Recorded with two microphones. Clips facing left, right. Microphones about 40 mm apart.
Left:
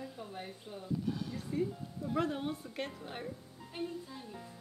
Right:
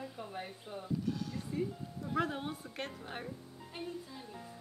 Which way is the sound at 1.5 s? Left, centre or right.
Centre.